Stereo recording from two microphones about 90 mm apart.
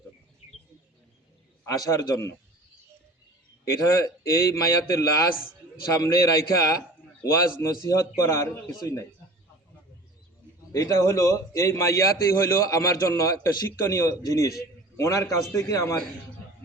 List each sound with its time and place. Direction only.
1.6 s a man's voice: 40° left (ahead or behind)
3.7 s a man's voice: 35° left (ahead or behind)
7.9 s a man's voice: 35° left (ahead or behind)
10.7 s a man's voice: 35° left (ahead or behind)